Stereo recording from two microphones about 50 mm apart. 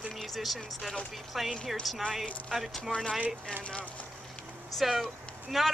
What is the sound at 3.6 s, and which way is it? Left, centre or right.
Speech, left.